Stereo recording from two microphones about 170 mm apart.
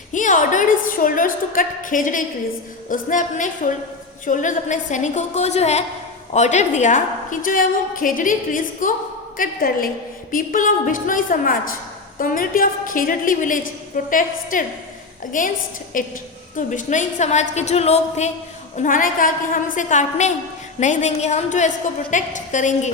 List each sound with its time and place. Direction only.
0.1 s a woman's voice: 50° left (ahead or behind)
18.8 s a woman's voice: 50° left (ahead or behind)